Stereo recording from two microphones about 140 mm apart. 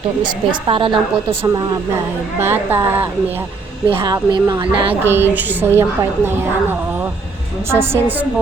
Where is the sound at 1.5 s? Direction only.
30° right (ahead or behind).